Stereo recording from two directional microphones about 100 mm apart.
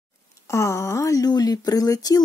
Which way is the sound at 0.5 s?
30° left (ahead or behind).